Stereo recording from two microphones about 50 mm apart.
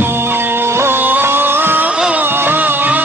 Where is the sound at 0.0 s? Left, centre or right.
Right.